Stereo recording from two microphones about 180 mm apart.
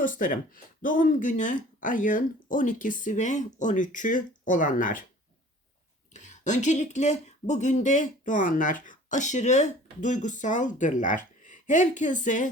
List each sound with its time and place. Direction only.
0.0 s speech: 50° left (ahead or behind)
6.1 s speech: 40° left (ahead or behind)